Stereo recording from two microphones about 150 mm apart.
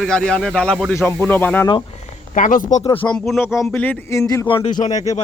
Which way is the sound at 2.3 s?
60° left (ahead or behind).